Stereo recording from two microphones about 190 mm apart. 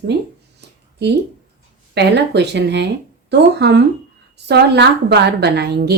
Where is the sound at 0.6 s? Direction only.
60° right (ahead or behind).